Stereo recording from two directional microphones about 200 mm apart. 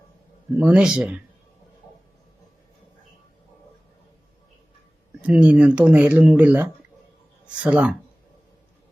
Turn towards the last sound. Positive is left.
turn(degrees=-5)  # may be behind; listen again after turning